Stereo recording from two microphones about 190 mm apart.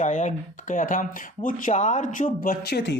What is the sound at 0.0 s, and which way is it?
Speech, 40° left (ahead or behind).